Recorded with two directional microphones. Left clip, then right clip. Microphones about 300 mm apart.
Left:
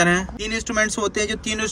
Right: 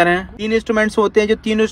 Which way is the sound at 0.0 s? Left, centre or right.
Centre.